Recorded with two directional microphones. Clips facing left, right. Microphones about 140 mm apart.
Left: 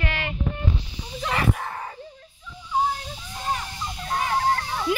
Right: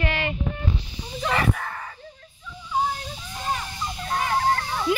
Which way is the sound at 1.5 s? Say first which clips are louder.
Left 1 dB; 20° left (ahead or behind).